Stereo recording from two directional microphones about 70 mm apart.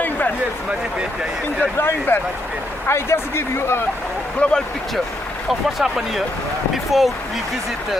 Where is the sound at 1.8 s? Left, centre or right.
Left.